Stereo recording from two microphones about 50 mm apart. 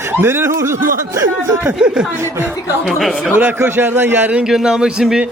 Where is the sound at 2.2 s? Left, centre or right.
Right.